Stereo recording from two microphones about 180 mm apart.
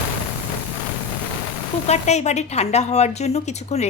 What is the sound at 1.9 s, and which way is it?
A woman's voice, 40° left (ahead or behind).